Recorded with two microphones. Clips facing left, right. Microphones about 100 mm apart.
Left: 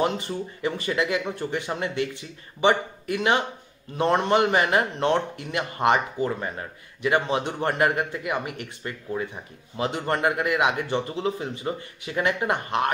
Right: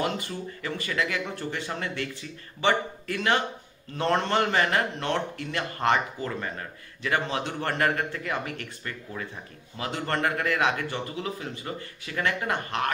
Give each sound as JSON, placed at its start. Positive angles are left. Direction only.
{"t": 0.0, "sound": "a man's voice", "side_deg": 20}